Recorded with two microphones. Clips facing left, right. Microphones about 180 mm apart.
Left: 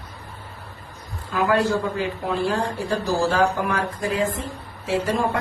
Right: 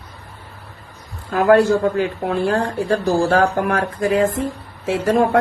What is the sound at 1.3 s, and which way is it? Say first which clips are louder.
A man's voice: right 7 dB; 55° right (ahead or behind).